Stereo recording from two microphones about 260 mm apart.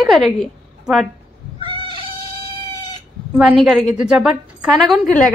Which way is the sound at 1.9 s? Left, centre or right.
Right.